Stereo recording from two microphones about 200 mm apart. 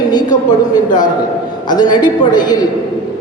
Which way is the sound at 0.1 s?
20° left (ahead or behind).